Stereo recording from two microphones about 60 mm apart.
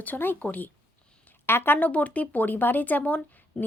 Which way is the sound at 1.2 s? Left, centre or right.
Left.